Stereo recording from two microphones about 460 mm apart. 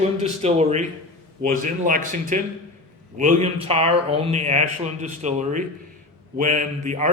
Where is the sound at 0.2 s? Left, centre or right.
Centre.